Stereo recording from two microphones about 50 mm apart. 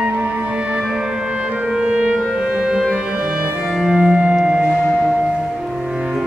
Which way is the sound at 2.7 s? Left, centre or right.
Centre.